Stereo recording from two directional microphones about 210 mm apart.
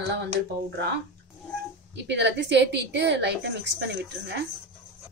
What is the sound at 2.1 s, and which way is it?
A woman's voice, 55° right (ahead or behind).